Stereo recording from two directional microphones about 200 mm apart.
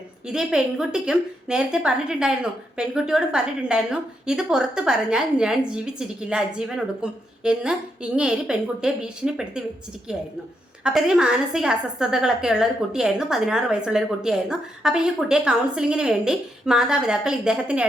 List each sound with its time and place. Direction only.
0.3 s a woman's voice: 5° right (ahead or behind)